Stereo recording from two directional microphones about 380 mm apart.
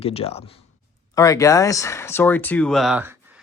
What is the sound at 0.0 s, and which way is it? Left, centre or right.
Speech, centre.